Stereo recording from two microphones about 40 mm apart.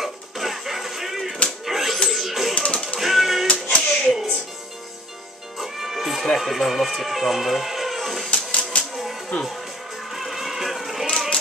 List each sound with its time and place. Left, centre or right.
0.0 s music: centre
1.7 s a sound: centre
2.0 s music: centre
2.5 s music: left
3.0 s music: centre
3.4 s music: left
5.6 s music: centre
6.3 s speech: centre
8.3 s typewriter: left
10.1 s a sound: centre
11.1 s a sound: centre